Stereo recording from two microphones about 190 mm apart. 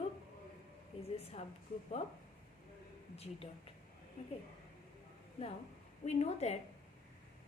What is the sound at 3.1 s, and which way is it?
Speech, 30° left (ahead or behind).